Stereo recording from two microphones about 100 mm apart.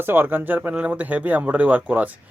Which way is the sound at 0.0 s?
20° right (ahead or behind).